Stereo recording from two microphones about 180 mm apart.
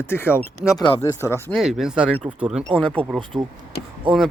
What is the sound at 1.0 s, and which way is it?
Speech, 15° left (ahead or behind).